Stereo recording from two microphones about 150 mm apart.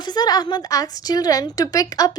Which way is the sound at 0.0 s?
30° left (ahead or behind).